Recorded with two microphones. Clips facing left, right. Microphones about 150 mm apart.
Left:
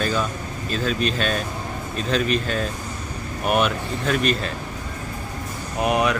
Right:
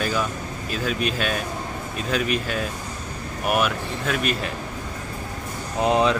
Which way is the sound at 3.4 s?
5° right (ahead or behind).